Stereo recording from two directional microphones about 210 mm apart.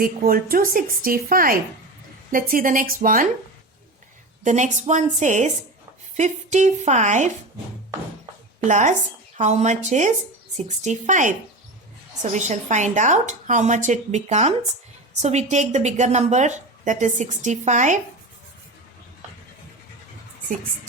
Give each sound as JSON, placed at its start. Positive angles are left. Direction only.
{"t": 0.0, "sound": "a woman's voice", "side_deg": -45}
{"t": 4.4, "sound": "a woman's voice", "side_deg": -35}
{"t": 8.6, "sound": "a woman's voice", "side_deg": -35}